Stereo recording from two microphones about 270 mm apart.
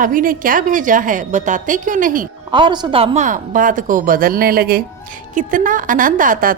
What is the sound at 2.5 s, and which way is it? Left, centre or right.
A woman's voice, centre.